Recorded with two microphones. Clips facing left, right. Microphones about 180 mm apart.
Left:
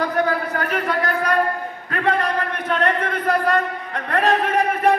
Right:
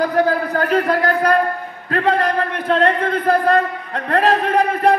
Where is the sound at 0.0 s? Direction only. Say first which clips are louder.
Right 4 dB; 35° right (ahead or behind).